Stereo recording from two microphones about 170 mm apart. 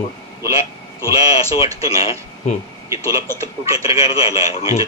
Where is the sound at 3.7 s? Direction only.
20° right (ahead or behind).